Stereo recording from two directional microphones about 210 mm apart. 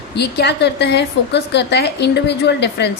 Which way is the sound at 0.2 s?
50° left (ahead or behind).